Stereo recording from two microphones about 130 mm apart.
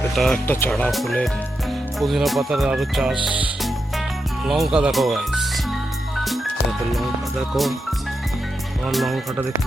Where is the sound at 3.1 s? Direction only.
40° left (ahead or behind).